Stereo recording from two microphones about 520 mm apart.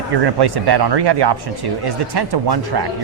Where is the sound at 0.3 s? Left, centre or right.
Right.